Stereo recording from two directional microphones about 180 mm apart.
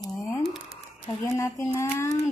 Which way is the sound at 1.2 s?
20° left (ahead or behind).